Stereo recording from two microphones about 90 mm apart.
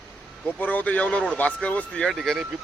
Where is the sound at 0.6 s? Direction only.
20° left (ahead or behind).